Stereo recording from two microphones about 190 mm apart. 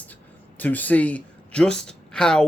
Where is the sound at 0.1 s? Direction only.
10° left (ahead or behind).